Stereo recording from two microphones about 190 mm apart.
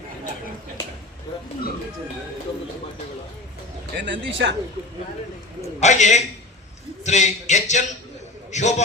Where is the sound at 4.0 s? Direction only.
75° right (ahead or behind).